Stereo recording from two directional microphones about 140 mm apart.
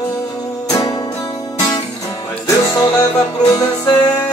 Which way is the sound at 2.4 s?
25° left (ahead or behind).